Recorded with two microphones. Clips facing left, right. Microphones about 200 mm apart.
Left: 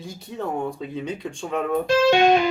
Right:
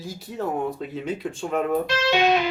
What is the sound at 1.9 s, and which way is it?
Speech, 45° left (ahead or behind).